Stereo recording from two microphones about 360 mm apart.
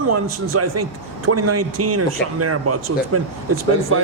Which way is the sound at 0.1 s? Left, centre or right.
Right.